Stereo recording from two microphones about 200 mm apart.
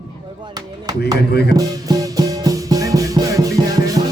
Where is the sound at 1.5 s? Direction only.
20° right (ahead or behind).